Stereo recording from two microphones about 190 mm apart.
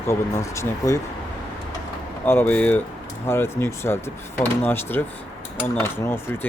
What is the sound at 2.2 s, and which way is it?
Speech, 10° left (ahead or behind).